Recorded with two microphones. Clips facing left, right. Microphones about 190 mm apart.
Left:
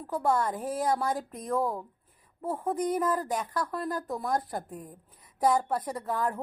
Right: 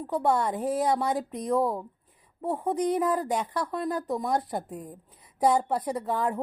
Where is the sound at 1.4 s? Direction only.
Centre (ahead or behind).